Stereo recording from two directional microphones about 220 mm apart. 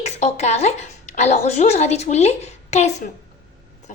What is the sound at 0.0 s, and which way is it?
A woman's voice, 30° left (ahead or behind).